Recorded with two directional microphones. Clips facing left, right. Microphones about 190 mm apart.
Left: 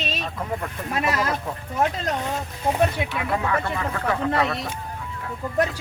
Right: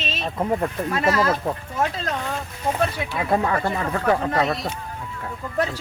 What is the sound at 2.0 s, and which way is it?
Speech, 20° left (ahead or behind).